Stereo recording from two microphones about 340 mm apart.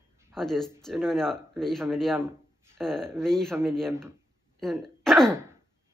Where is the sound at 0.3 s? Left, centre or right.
Centre.